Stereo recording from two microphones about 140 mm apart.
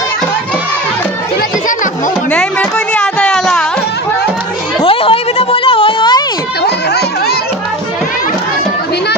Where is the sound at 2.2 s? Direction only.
10° left (ahead or behind).